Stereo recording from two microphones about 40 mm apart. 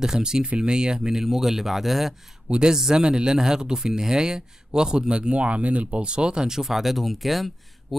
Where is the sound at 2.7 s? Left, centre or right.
Centre; by 6.0 s right.